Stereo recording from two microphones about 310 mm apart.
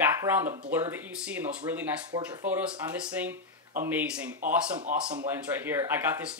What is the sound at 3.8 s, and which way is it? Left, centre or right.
Speech, centre.